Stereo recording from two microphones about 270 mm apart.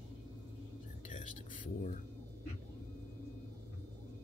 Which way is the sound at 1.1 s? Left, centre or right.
Left.